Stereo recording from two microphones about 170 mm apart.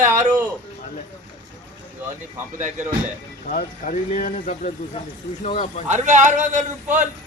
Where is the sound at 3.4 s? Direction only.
50° left (ahead or behind).